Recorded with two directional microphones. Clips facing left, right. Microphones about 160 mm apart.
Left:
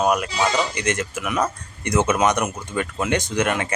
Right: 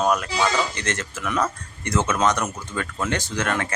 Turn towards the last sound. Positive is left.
turn(degrees=15)  # may be behind; listen again after turning